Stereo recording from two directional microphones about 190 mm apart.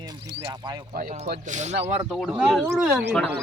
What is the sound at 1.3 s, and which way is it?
Speech, 40° right (ahead or behind).